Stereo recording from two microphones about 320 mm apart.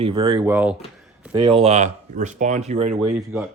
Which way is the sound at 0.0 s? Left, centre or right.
Centre.